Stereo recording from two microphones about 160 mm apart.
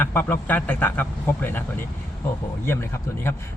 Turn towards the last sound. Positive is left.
turn(degrees=15)  # may be behind; listen again after turning